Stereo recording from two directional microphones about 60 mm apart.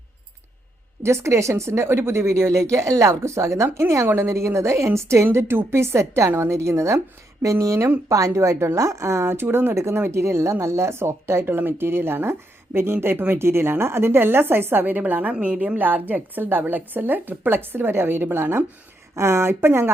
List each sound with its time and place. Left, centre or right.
1.0 s speech: right
4.0 s a woman's voice: right
19.1 s a woman's voice: right